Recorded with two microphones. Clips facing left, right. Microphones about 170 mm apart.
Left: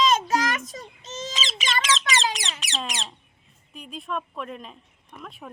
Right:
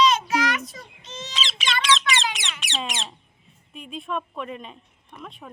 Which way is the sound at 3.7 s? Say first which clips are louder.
Right 2 dB; centre (ahead or behind).